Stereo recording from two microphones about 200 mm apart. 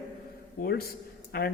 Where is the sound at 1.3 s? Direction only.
50° left (ahead or behind).